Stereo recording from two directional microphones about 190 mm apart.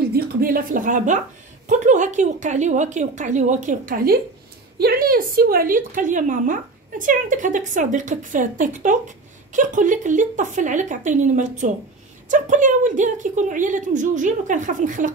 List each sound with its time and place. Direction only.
0.1 s a woman's voice: 50° right (ahead or behind)